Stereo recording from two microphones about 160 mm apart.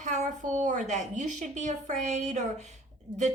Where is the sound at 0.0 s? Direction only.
50° right (ahead or behind).